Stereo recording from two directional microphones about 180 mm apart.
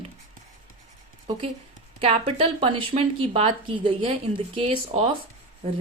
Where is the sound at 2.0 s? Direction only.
30° right (ahead or behind).